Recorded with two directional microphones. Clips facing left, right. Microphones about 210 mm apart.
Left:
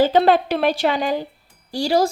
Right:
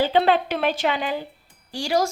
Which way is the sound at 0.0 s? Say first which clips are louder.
Left 4 dB; 40° left (ahead or behind).